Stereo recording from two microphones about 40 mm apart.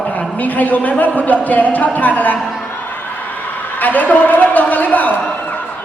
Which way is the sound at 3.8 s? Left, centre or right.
Left.